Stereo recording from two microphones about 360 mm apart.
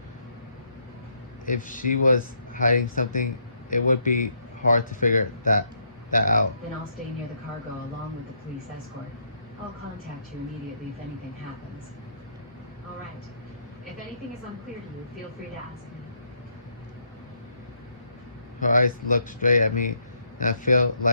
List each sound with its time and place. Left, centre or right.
1.5 s speech: left
18.6 s speech: left